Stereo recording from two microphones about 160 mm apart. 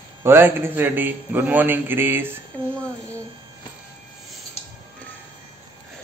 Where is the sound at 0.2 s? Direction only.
15° right (ahead or behind).